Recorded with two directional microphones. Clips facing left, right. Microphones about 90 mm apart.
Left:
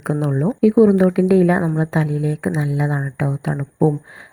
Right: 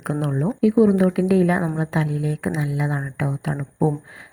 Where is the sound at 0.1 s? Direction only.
20° left (ahead or behind).